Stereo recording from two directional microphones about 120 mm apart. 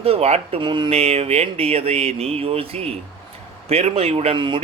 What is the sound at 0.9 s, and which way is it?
Speech, 60° right (ahead or behind).